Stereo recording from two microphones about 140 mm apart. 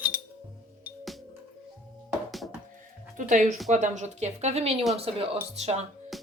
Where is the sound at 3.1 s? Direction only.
65° right (ahead or behind); by 5.8 s 50° right (ahead or behind).